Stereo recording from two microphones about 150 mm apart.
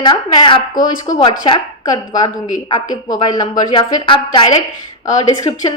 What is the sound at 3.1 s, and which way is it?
A woman's voice, 25° left (ahead or behind).